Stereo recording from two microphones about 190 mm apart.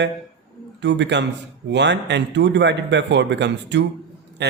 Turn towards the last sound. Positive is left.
turn(degrees=-65)  # may be behind; listen again after turning